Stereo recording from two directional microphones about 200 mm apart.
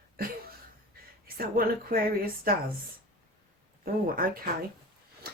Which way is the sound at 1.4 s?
50° right (ahead or behind).